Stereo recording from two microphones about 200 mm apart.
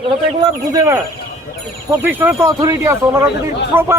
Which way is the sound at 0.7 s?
15° right (ahead or behind).